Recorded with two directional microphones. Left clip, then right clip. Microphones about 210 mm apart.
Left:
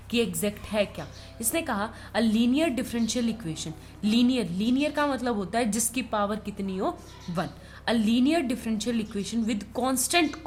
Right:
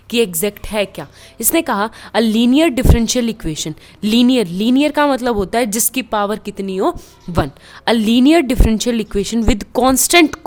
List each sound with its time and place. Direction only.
0.1 s a woman's voice: 50° right (ahead or behind)